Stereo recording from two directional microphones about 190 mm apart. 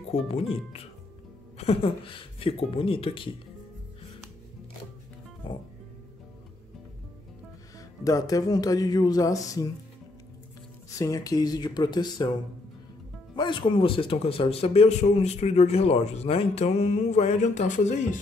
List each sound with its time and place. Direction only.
0.3 s speech: 30° left (ahead or behind)
8.0 s speech: 20° left (ahead or behind)
11.0 s speech: 20° left (ahead or behind)
13.4 s speech: 25° left (ahead or behind)